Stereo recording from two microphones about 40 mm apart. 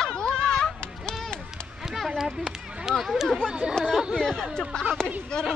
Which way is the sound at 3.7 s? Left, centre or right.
Centre.